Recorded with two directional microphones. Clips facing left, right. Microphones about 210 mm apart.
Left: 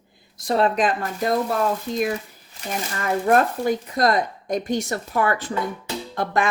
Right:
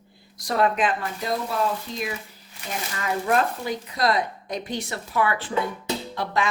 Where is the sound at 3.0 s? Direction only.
50° left (ahead or behind).